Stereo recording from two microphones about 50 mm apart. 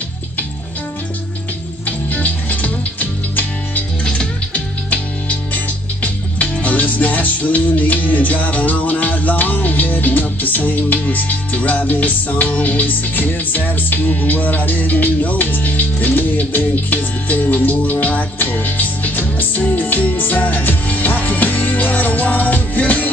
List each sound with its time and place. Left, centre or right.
1.9 s music: left
4.8 s music: left